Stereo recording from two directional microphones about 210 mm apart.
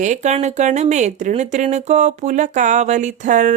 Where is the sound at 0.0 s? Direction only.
35° right (ahead or behind).